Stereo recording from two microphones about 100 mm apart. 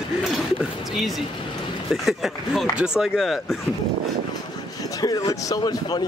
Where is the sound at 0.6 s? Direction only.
Centre (ahead or behind).